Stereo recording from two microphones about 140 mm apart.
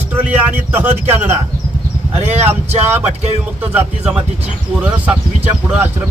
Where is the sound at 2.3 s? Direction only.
50° right (ahead or behind).